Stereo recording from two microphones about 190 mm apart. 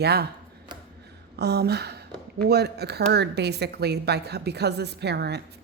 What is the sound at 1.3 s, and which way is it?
A woman's voice, 60° right (ahead or behind).